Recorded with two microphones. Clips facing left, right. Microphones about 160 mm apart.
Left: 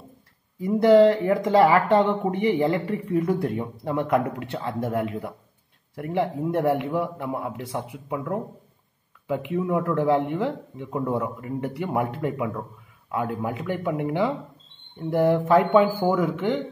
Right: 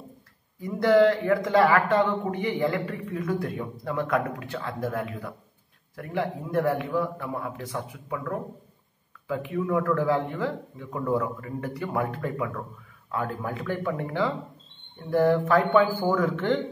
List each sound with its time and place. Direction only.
0.6 s speech: 25° left (ahead or behind); by 16.6 s 10° left (ahead or behind)